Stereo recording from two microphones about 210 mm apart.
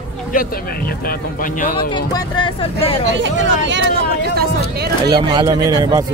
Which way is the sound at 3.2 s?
60° right (ahead or behind).